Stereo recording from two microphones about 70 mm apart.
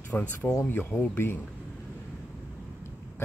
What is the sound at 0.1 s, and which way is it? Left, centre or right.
Speech, left.